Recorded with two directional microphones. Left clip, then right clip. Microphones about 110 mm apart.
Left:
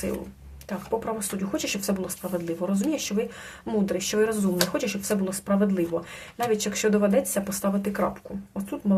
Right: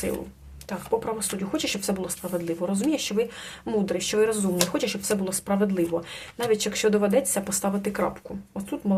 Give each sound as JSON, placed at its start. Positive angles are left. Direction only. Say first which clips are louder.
{"t": 0.7, "sound": "speech", "louder": "right 2 dB", "side_deg": -20}